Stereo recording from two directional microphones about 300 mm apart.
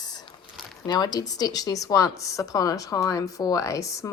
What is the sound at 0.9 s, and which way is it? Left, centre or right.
A woman's voice, centre.